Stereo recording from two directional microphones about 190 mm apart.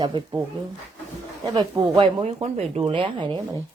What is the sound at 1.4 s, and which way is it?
Speech, 25° right (ahead or behind).